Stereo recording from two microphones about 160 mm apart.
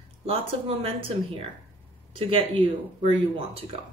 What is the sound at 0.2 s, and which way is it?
Speech, 35° right (ahead or behind).